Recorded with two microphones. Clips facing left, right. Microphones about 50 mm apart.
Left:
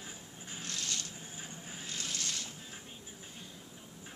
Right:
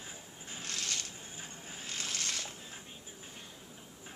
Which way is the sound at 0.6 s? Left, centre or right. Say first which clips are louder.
Right 1 dB; right.